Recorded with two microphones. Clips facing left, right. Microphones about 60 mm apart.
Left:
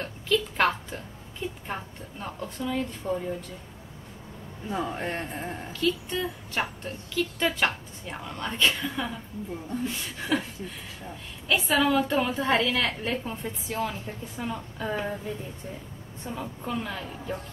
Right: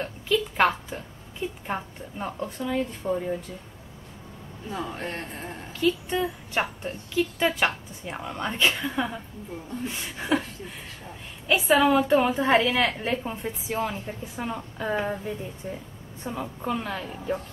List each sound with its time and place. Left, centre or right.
0.0 s a woman's voice: centre
4.6 s a man's voice: centre
5.7 s a woman's voice: centre
11.4 s a woman's voice: centre
16.3 s a woman's voice: centre